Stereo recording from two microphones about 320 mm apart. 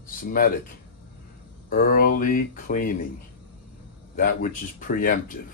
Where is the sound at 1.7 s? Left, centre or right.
Left.